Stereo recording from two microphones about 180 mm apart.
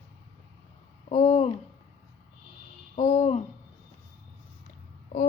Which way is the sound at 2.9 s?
40° left (ahead or behind).